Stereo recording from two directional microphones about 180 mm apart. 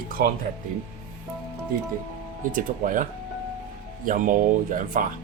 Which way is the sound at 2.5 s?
50° right (ahead or behind).